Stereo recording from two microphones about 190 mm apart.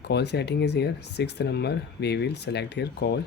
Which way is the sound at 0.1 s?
60° left (ahead or behind).